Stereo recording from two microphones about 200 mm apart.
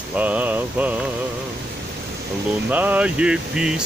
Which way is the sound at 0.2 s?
10° right (ahead or behind).